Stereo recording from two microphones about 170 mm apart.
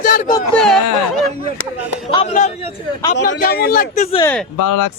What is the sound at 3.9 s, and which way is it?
Speech, 40° left (ahead or behind).